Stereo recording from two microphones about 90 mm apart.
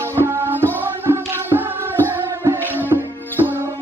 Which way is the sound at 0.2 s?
25° right (ahead or behind).